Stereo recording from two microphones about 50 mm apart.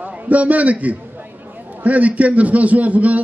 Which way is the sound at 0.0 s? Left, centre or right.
Right.